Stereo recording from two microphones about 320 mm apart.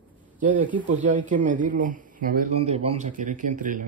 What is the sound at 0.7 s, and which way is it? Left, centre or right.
Speech, right.